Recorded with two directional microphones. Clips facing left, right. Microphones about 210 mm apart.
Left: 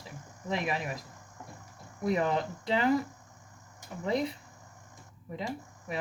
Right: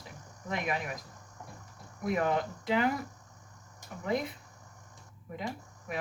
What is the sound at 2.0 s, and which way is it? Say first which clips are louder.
Speech: left 1 dB; 35° left (ahead or behind).